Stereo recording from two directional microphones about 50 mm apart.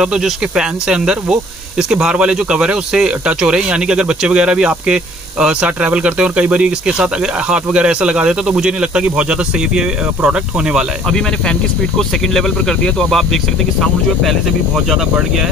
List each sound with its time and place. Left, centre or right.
0.0 s speech: centre
11.1 s speech: centre